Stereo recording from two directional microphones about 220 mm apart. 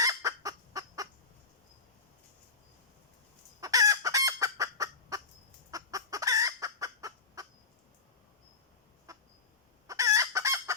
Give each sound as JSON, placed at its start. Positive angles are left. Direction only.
{"t": 0.0, "sound": "fowl", "side_deg": -15}
{"t": 3.6, "sound": "fowl", "side_deg": -15}
{"t": 9.1, "sound": "fowl", "side_deg": -15}
{"t": 9.8, "sound": "chicken", "side_deg": -15}